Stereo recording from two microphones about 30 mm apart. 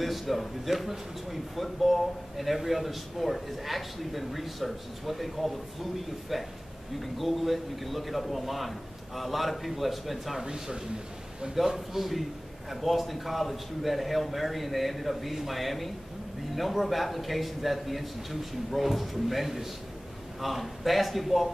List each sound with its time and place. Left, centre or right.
0.0 s speech: centre
10.4 s speech: right
11.5 s speech: centre